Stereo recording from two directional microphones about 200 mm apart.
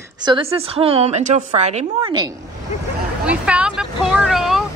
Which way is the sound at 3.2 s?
5° right (ahead or behind).